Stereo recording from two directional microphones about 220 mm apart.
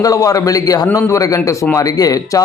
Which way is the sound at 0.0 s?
15° left (ahead or behind).